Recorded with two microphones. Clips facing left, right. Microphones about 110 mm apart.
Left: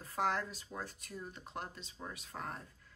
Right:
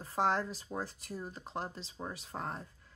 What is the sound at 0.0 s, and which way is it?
Speech, 30° right (ahead or behind).